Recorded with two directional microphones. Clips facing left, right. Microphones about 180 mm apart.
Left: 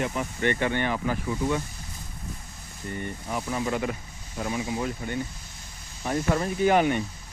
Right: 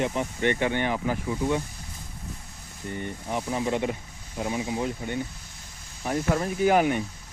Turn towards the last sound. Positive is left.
turn(degrees=-10)  # may be behind; listen again after turning